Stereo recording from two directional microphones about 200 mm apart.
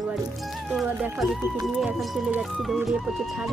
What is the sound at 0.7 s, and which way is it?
Music, 5° right (ahead or behind).